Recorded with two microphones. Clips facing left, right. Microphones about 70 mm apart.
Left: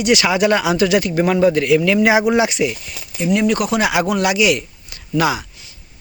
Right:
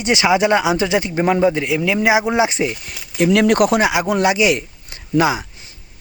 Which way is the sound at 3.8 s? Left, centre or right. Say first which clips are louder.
Right 1 dB; right.